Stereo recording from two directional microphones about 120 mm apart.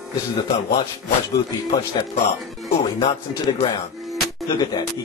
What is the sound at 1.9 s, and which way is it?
A man's voice, 45° left (ahead or behind).